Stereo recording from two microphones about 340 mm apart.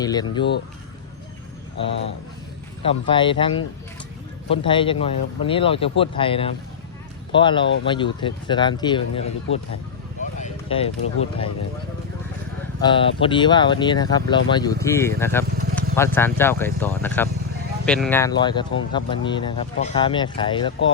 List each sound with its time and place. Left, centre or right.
0.0 s speech: centre
2.8 s speech: centre
10.3 s a sound: centre
12.8 s speech: centre